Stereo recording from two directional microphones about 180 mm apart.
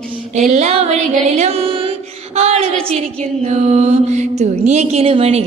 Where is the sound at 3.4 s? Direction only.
35° right (ahead or behind).